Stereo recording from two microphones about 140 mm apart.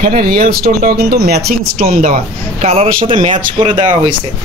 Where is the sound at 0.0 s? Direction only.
85° right.